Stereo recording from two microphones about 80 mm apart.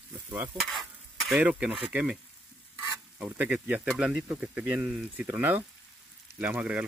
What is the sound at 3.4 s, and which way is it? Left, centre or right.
Speech, centre.